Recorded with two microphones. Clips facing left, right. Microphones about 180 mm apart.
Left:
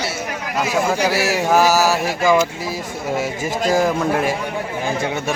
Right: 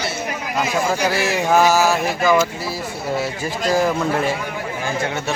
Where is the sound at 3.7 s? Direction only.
10° left (ahead or behind).